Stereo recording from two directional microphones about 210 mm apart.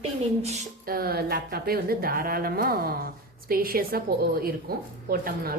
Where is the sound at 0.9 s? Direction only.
45° right (ahead or behind).